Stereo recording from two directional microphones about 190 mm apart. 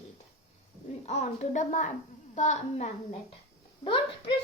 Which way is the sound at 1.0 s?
35° left (ahead or behind).